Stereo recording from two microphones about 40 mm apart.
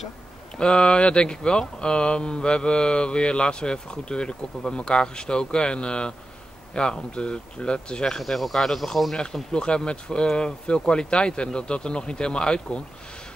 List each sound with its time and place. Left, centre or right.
0.6 s speech: left
8.2 s speech: centre
9.1 s speech: centre